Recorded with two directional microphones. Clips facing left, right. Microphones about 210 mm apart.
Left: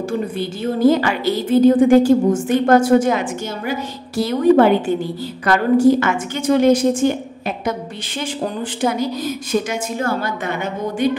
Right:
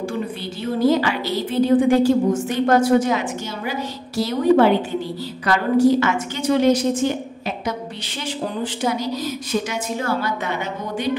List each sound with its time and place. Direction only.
0.4 s a woman's voice: 50° left (ahead or behind)
8.8 s a woman's voice: 55° left (ahead or behind)